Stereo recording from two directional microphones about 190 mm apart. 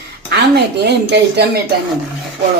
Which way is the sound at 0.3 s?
60° right (ahead or behind).